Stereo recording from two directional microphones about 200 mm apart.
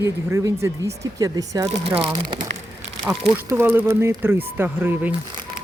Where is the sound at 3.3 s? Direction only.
10° right (ahead or behind).